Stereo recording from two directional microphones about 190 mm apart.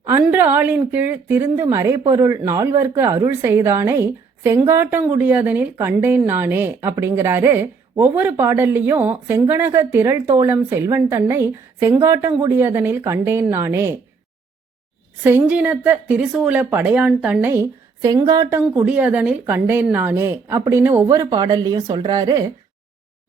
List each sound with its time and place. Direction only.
0.0 s a woman's voice: 15° right (ahead or behind)
15.2 s a woman's voice: 10° right (ahead or behind)